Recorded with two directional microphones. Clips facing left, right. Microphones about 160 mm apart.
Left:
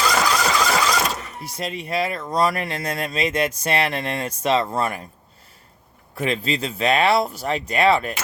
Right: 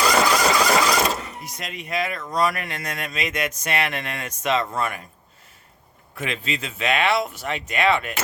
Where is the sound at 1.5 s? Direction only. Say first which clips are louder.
Left 7 dB; 30° left (ahead or behind).